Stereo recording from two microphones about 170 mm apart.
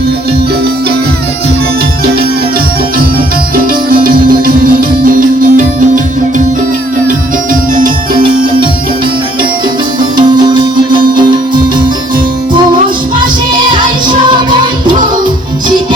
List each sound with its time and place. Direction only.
3.5 s music: 55° right (ahead or behind)
10.2 s music: 25° right (ahead or behind)
13.1 s music: 30° right (ahead or behind)